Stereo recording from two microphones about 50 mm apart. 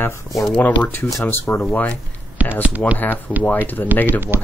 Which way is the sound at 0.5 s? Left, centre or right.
Left.